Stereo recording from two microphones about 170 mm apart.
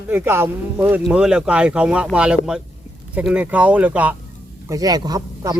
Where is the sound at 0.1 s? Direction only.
15° right (ahead or behind).